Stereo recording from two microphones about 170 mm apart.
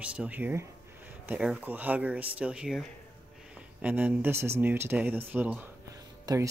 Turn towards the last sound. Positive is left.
turn(degrees=-25)  # may be behind; listen again after turning